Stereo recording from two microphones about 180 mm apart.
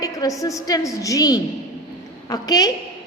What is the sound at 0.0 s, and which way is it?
A woman's voice, 20° left (ahead or behind).